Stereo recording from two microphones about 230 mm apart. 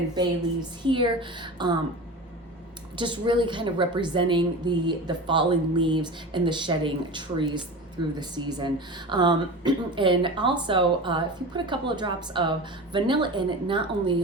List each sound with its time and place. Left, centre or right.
0.9 s a woman's voice: right
3.0 s a woman's voice: right